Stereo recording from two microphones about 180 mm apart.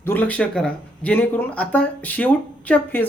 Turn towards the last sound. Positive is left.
turn(degrees=10)  # may be behind; listen again after turning